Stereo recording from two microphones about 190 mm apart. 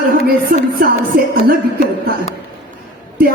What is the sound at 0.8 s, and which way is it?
Music, 50° right (ahead or behind).